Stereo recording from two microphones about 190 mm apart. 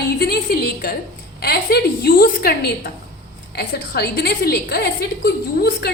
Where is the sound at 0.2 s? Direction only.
55° left (ahead or behind).